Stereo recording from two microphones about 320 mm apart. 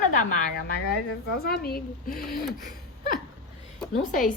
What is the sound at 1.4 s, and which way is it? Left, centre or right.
Speech, left.